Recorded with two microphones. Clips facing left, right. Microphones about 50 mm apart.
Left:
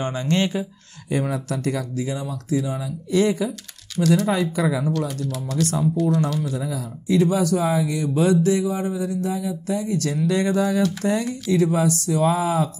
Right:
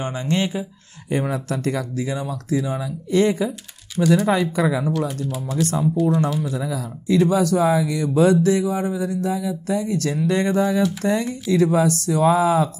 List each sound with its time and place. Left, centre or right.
0.0 s speech: right
1.0 s speech: right
4.0 s speech: centre
4.3 s speech: right
5.0 s speech: right
6.6 s speech: right